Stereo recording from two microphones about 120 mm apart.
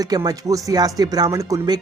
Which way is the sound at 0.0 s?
30° right (ahead or behind).